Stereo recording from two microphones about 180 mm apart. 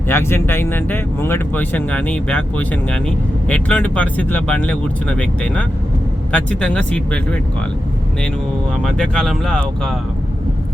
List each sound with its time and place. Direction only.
0.1 s speech: 15° left (ahead or behind)
8.8 s speech: centre (ahead or behind)